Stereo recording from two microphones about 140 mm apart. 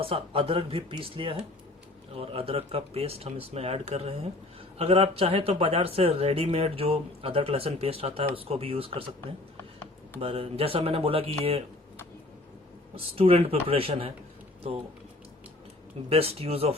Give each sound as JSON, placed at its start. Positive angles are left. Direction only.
{"t": 0.0, "sound": "speech", "side_deg": -40}
{"t": 10.2, "sound": "speech", "side_deg": -40}
{"t": 13.0, "sound": "speech", "side_deg": -45}
{"t": 16.0, "sound": "speech", "side_deg": -45}